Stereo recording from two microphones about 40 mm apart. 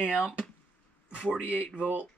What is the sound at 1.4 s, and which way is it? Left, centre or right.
Speech, right.